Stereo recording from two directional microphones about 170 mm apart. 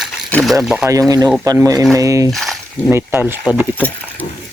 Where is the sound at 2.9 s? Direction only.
15° right (ahead or behind).